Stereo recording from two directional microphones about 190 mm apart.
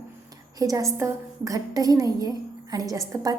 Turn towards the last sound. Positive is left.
turn(degrees=-15)  # may be behind; listen again after turning